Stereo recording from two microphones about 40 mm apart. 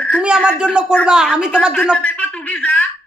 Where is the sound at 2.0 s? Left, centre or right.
Left.